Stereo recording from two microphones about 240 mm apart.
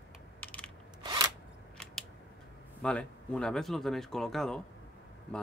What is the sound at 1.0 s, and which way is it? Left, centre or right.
Scissors, centre.